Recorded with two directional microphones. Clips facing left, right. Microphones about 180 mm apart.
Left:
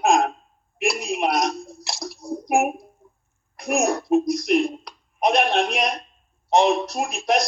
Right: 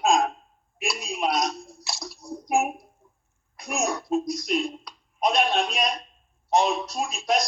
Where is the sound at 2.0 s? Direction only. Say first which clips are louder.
Left 9 dB; 45° left (ahead or behind).